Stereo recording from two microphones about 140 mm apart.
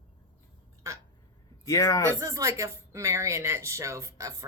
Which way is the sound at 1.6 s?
25° left (ahead or behind).